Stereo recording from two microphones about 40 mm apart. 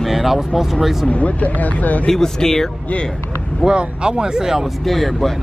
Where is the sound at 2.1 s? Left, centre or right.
Centre.